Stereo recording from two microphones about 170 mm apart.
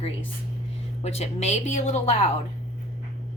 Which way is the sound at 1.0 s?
40° left (ahead or behind).